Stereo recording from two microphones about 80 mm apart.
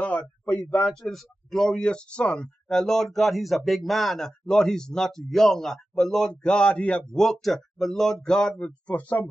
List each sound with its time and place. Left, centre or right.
0.0 s speech: centre
1.0 s speech: centre